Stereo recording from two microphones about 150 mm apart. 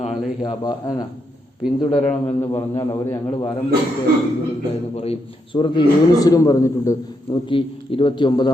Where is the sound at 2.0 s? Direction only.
50° left (ahead or behind).